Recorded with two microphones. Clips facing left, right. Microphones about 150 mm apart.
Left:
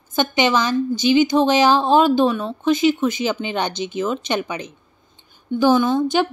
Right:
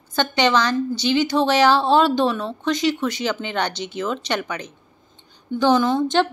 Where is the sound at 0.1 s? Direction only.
15° left (ahead or behind).